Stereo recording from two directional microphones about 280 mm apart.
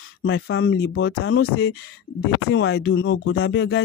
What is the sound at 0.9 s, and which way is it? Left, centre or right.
Speech, left.